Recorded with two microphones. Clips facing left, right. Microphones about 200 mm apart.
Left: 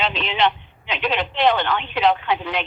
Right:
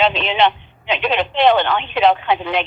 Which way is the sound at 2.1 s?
65° right (ahead or behind).